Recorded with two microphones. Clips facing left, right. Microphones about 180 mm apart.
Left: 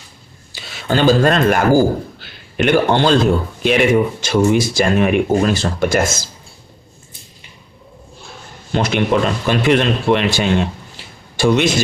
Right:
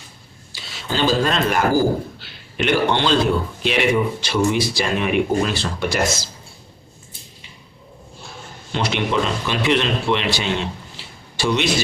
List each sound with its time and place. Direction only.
0.5 s speech: 55° left (ahead or behind)
8.7 s a man's voice: 50° left (ahead or behind)